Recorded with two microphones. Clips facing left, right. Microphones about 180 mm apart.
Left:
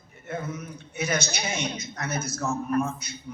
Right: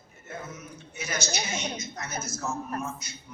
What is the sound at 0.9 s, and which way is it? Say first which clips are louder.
A woman's voice: left 4 dB; 60° left (ahead or behind).